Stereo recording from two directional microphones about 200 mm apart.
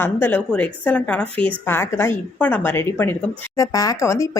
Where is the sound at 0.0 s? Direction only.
10° left (ahead or behind).